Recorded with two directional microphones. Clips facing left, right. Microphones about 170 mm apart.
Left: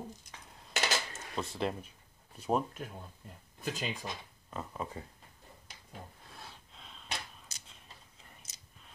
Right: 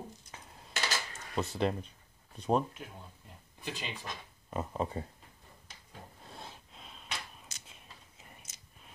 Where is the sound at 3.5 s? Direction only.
45° left (ahead or behind).